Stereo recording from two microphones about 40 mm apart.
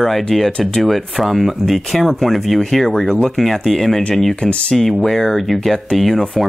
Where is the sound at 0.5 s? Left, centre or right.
Centre.